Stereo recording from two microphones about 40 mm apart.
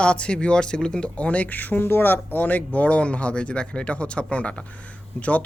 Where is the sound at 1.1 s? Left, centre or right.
Left.